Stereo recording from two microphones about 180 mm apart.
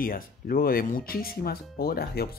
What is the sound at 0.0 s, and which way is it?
Speech, 55° left (ahead or behind).